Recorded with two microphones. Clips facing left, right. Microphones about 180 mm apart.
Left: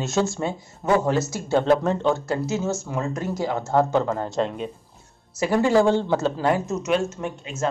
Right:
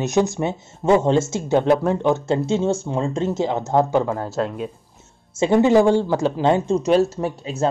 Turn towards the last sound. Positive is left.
turn(degrees=-35)  # may be behind; listen again after turning